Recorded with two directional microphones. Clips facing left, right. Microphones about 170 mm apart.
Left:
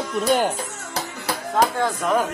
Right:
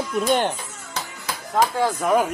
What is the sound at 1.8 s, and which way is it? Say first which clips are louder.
Speech: right 2 dB; 10° right (ahead or behind).